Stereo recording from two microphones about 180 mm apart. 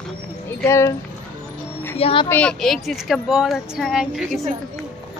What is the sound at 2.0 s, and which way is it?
Speech, 30° left (ahead or behind).